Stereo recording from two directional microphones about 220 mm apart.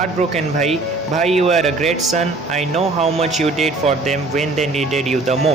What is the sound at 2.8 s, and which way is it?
A man's voice, 30° right (ahead or behind).